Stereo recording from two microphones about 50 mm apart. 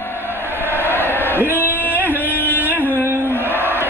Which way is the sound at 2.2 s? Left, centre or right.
Left.